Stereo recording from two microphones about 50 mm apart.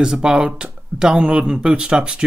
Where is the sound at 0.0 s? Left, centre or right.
Centre.